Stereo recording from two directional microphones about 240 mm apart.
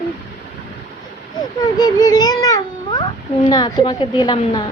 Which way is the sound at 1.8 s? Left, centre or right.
Centre.